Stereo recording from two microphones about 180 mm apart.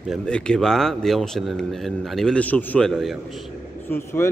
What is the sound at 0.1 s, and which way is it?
A man's voice, 5° left (ahead or behind).